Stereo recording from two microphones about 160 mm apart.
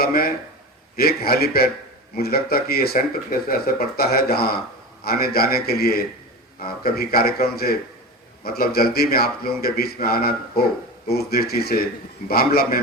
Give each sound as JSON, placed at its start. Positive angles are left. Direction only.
{"t": 0.0, "sound": "speech", "side_deg": 70}